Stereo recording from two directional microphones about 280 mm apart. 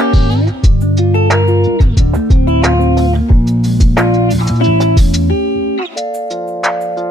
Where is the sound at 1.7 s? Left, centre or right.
Centre.